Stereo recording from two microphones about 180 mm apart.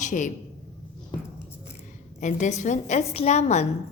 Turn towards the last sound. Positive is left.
turn(degrees=40)  # may be behind; listen again after turning